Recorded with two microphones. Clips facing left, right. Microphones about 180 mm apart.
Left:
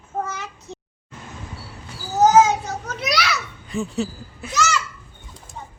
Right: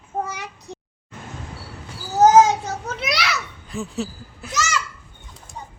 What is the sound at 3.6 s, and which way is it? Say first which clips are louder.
Speech: left 4 dB; centre (ahead or behind).